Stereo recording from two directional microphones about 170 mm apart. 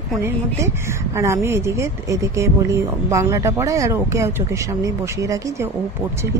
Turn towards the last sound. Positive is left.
turn(degrees=-20)  # may be behind; listen again after turning